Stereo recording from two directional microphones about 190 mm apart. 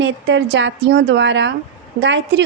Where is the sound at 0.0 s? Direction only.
70° right (ahead or behind).